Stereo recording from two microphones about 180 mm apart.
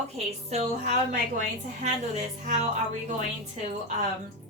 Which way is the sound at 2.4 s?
40° right (ahead or behind).